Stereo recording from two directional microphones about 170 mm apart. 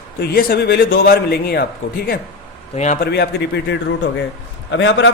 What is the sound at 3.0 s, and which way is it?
A man's voice, 75° left (ahead or behind).